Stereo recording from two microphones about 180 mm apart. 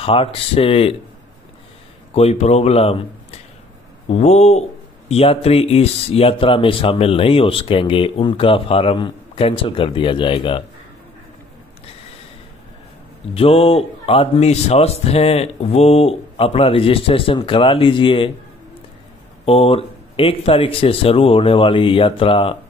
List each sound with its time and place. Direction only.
0.0 s speech: 30° left (ahead or behind)
2.1 s speech: 35° left (ahead or behind)
13.3 s speech: 30° left (ahead or behind)
19.4 s speech: 30° left (ahead or behind)